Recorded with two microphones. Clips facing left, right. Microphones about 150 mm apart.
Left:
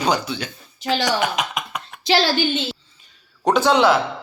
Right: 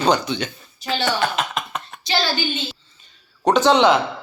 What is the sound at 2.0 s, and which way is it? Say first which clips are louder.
Speech: left 5 dB; 90° left.